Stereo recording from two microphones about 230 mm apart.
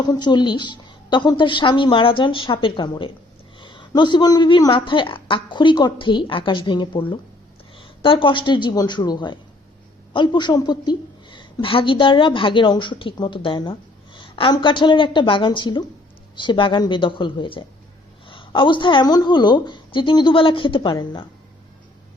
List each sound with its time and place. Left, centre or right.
0.0 s a woman's voice: centre